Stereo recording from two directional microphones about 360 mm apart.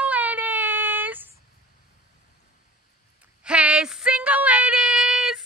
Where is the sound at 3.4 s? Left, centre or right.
Centre.